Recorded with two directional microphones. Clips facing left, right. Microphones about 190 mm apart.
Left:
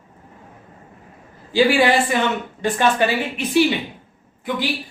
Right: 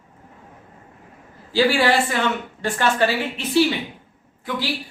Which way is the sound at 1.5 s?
15° left (ahead or behind).